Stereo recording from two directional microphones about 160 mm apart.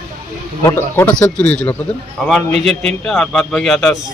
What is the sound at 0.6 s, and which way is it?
A man's voice, 15° left (ahead or behind).